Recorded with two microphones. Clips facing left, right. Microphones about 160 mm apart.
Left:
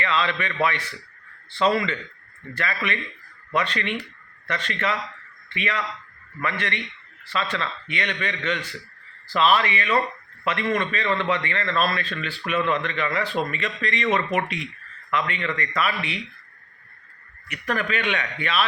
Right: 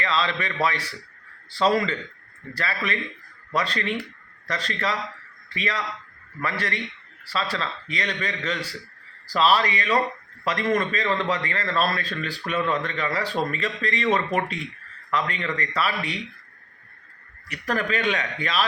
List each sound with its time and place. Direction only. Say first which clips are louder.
0.0 s a man's voice: left 1 dB; 35° right (ahead or behind)
17.5 s a man's voice: right 1 dB; 35° right (ahead or behind)